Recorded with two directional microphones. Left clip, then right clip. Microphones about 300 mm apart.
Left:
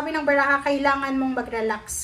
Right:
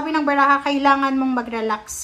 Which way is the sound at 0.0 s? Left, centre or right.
Centre.